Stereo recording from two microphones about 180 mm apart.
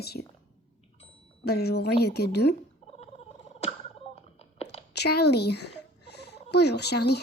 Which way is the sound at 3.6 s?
35° left (ahead or behind).